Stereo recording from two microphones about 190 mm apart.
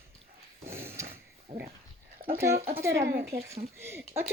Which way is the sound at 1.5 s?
30° right (ahead or behind).